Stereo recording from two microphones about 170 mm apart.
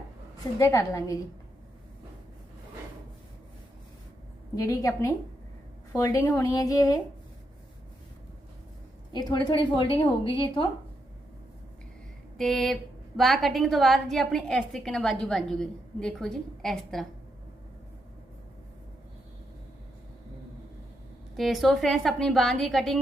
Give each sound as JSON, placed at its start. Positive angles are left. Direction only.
{"t": 0.6, "sound": "speech", "side_deg": 20}
{"t": 4.5, "sound": "speech", "side_deg": 20}
{"t": 9.1, "sound": "a woman's voice", "side_deg": 25}
{"t": 12.4, "sound": "a woman's voice", "side_deg": 0}
{"t": 21.3, "sound": "a woman's voice", "side_deg": 0}